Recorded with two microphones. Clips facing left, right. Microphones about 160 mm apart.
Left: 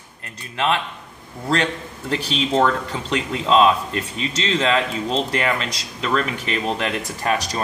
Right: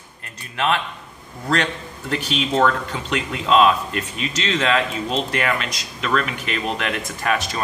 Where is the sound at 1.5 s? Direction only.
30° left (ahead or behind).